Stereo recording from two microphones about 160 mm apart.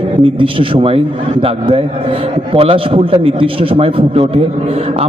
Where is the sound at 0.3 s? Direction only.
35° right (ahead or behind).